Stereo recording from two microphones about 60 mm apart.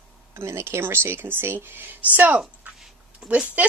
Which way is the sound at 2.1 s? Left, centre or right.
Right.